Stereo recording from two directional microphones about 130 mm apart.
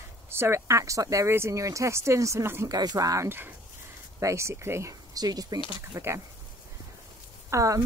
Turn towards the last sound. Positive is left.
turn(degrees=-25)  # may be behind; listen again after turning